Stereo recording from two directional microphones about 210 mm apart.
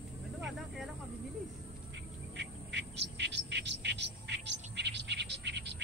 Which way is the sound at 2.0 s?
55° right (ahead or behind).